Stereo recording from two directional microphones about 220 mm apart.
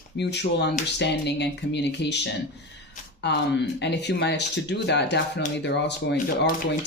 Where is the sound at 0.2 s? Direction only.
50° left (ahead or behind).